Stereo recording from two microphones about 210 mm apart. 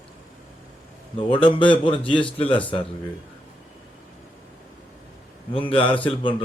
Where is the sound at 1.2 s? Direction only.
25° left (ahead or behind).